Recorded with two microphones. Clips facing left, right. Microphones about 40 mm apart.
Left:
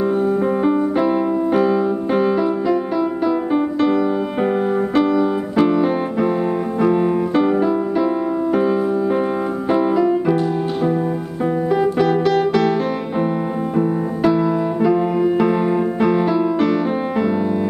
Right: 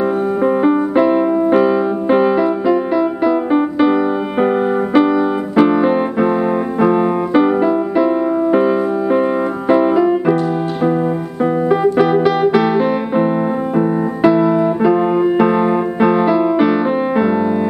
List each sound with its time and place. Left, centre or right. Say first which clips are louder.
0.7 s piano: right 4 dB; centre
3.3 s music: right 4 dB; centre
9.7 s piano: right 4 dB; centre
11.7 s piano: right 3 dB; centre
13.7 s music: right 2 dB; centre